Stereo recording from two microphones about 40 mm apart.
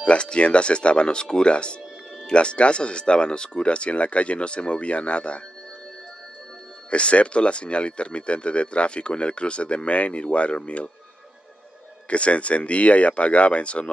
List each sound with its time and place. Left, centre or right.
0.0 s speech: left
6.9 s speech: left
12.1 s speech: left